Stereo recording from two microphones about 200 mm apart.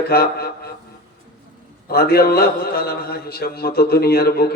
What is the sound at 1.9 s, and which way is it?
A man's voice, 50° left (ahead or behind).